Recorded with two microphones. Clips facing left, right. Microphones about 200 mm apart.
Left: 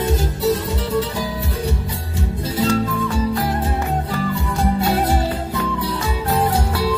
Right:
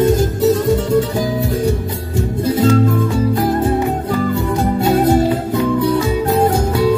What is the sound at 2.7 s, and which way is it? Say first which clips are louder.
Music: right 5 dB; 50° right (ahead or behind).